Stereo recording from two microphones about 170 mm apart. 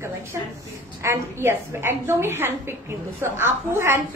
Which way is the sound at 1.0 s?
15° right (ahead or behind).